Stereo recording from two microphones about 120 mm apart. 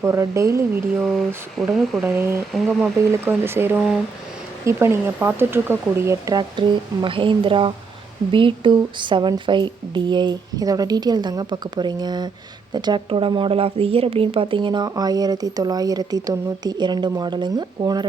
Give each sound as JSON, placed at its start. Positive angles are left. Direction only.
{"t": 0.0, "sound": "speech", "side_deg": -25}
{"t": 0.9, "sound": "speech", "side_deg": 0}
{"t": 2.0, "sound": "speech", "side_deg": -20}
{"t": 2.5, "sound": "speech", "side_deg": 0}
{"t": 3.1, "sound": "speech", "side_deg": -20}
{"t": 6.6, "sound": "a woman's voice", "side_deg": -45}